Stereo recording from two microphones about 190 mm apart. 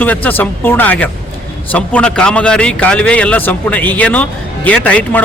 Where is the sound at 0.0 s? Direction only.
10° left (ahead or behind).